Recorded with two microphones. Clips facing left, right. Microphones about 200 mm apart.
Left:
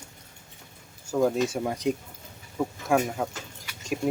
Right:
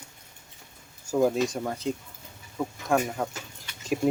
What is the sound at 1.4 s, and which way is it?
Speech, 10° left (ahead or behind).